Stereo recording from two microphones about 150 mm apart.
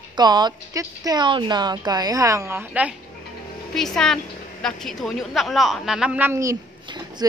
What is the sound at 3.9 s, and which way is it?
A woman's voice, 5° left (ahead or behind).